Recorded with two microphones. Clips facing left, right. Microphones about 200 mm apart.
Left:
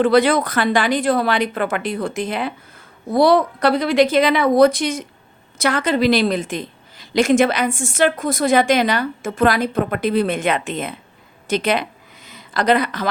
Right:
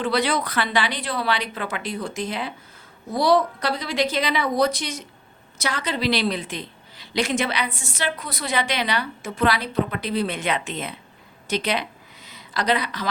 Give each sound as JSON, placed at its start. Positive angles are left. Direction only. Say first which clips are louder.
{"t": 0.0, "sound": "a woman's voice", "louder": "left 8 dB", "side_deg": 50}